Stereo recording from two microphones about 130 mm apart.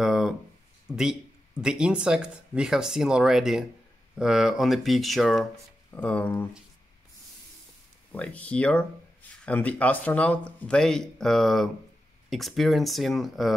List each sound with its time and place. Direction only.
0.0 s a sound: centre (ahead or behind)
1.6 s speech: 5° right (ahead or behind); by 6.4 s 10° left (ahead or behind)
8.1 s speech: 10° left (ahead or behind)